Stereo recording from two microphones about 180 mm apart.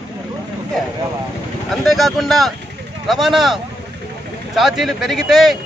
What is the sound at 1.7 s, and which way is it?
A man's voice, centre (ahead or behind).